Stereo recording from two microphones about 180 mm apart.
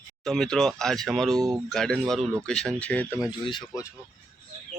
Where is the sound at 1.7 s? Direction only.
5° left (ahead or behind).